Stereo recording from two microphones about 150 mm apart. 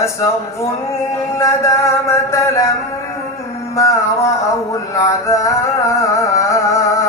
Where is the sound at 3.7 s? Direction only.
20° left (ahead or behind).